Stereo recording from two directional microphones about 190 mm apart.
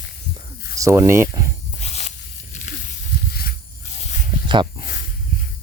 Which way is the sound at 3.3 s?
55° left (ahead or behind).